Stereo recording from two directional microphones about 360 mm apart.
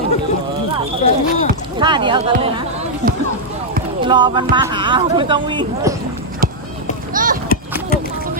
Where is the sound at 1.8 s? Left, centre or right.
Centre.